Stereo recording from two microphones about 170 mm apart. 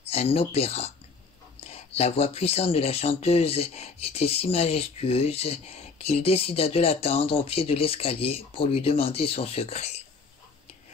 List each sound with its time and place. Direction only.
0.0 s speech: 35° left (ahead or behind)